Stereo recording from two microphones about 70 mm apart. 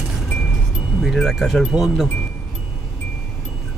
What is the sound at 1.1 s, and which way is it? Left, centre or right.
Speech, centre.